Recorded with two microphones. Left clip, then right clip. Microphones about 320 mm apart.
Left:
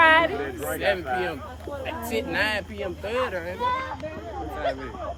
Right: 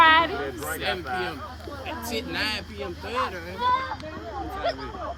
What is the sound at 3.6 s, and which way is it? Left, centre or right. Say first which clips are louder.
Speech: right 4 dB; right.